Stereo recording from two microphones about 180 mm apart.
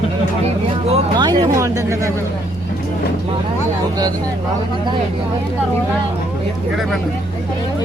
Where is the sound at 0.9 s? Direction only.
25° right (ahead or behind).